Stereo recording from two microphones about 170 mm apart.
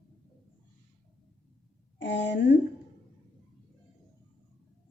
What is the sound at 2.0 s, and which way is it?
Speech, 90° left.